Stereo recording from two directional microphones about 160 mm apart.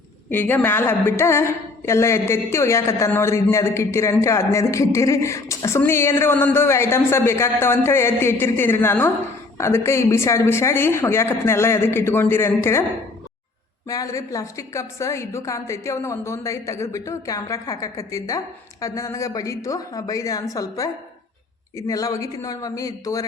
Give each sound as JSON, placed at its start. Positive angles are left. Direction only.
{"t": 0.3, "sound": "a woman's voice", "side_deg": 10}
{"t": 13.8, "sound": "a woman's voice", "side_deg": 20}